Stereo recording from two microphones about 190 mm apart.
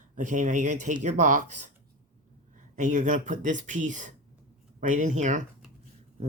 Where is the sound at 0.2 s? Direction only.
45° right (ahead or behind).